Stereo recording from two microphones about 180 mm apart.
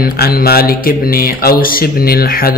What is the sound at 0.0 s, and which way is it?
Mantra, 55° left (ahead or behind).